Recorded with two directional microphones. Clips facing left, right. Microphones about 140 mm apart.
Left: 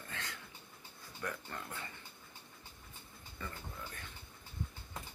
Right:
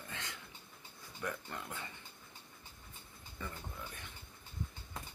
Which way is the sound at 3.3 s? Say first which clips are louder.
Right 1 dB; 15° right (ahead or behind).